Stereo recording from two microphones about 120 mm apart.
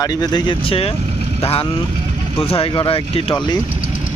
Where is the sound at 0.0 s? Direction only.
30° left (ahead or behind); by 3.3 s 50° left (ahead or behind).